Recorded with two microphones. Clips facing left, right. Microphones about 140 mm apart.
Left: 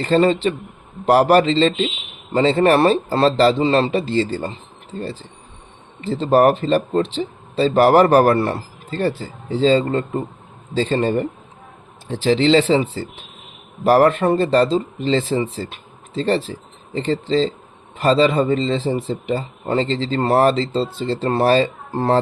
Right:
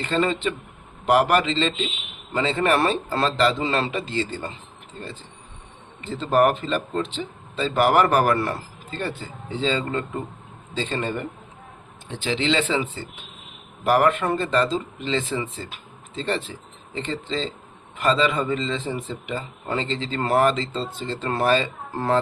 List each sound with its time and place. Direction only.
0.0 s speech: 35° left (ahead or behind)
6.0 s speech: 30° left (ahead or behind)